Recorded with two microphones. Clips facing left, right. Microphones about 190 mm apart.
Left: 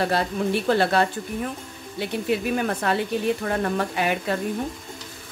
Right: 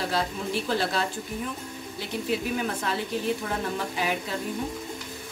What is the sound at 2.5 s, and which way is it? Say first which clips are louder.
A woman's voice: left 5 dB; 60° left (ahead or behind).